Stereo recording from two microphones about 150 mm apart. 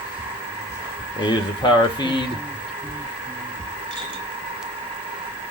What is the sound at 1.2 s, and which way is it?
Speech, 30° left (ahead or behind).